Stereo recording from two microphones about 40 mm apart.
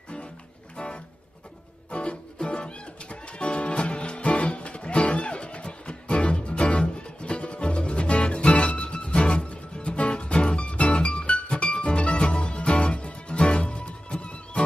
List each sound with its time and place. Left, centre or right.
0.7 s music: left